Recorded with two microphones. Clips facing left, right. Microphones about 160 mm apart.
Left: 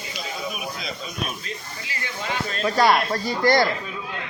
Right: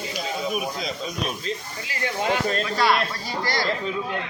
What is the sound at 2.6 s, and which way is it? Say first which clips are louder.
Speech: left 8 dB; 45° left (ahead or behind).